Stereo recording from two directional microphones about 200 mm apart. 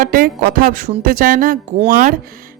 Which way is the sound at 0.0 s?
45° right (ahead or behind).